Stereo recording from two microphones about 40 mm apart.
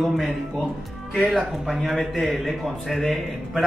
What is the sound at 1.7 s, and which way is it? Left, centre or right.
Speech, centre.